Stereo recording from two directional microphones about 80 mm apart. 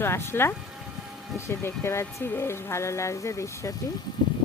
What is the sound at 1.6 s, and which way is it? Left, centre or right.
Speech, left.